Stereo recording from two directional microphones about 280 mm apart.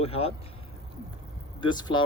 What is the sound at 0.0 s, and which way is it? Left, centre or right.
Speech, left.